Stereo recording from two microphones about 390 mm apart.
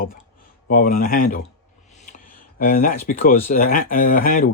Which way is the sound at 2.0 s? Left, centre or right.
Left.